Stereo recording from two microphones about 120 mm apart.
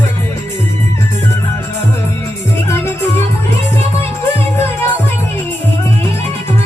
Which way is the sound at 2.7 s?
20° left (ahead or behind).